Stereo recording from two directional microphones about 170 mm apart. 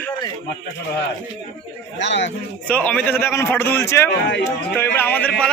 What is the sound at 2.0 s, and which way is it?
Speech, 90° left.